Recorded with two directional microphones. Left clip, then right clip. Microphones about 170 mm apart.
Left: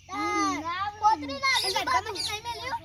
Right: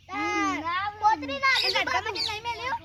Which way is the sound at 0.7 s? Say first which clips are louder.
Right 1 dB; 15° left (ahead or behind).